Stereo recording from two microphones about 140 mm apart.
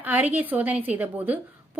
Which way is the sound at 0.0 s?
10° right (ahead or behind).